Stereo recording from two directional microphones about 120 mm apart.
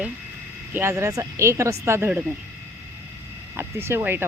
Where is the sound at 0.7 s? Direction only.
20° right (ahead or behind).